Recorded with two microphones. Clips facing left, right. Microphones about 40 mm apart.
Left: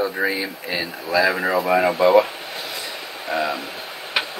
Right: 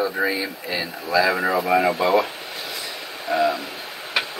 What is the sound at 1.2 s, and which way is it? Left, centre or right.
Speech, centre.